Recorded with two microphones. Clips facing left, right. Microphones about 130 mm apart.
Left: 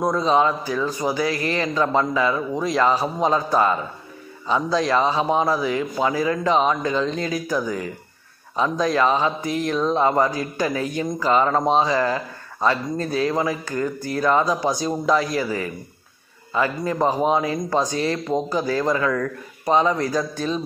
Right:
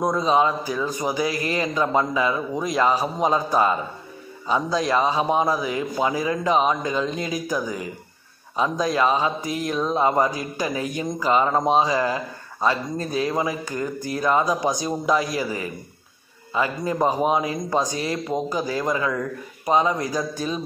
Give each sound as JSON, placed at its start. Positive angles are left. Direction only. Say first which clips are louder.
{"t": 0.0, "sound": "speech", "louder": "left 1 dB", "side_deg": -15}